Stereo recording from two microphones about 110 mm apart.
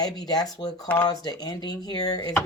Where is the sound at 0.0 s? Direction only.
35° left (ahead or behind).